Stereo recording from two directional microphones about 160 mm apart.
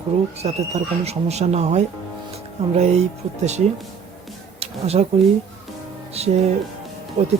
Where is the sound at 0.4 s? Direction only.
45° right (ahead or behind).